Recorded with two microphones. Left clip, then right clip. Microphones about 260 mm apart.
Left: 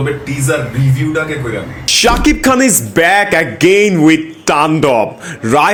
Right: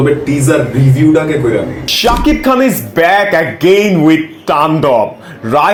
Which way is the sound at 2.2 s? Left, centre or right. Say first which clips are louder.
Right 1 dB; left.